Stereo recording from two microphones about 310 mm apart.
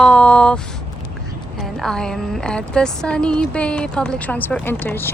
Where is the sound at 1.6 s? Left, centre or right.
Centre.